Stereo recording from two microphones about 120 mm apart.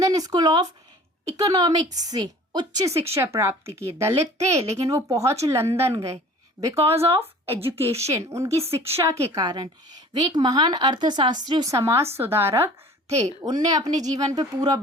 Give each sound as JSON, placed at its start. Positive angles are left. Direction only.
{"t": 0.0, "sound": "a woman's voice", "side_deg": -30}
{"t": 11.7, "sound": "a woman's voice", "side_deg": -25}